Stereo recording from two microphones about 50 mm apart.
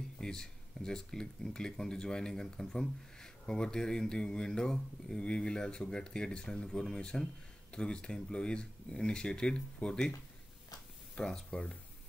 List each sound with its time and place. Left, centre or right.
0.2 s speech: centre
11.1 s speech: centre